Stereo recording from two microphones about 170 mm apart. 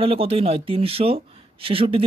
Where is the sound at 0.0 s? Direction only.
35° right (ahead or behind).